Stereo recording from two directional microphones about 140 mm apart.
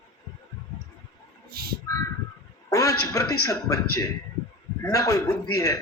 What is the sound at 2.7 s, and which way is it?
A man's voice, 25° left (ahead or behind).